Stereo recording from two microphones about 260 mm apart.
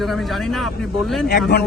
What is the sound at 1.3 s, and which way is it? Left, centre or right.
Speech, left.